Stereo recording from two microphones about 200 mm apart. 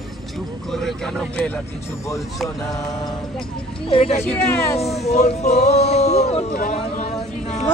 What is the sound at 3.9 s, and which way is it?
Speech, 30° left (ahead or behind).